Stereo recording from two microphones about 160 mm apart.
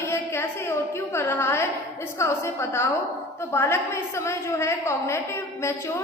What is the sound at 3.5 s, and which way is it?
A woman's voice, 15° left (ahead or behind).